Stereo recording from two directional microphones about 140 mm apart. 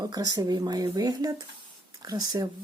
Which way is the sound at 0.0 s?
30° right (ahead or behind).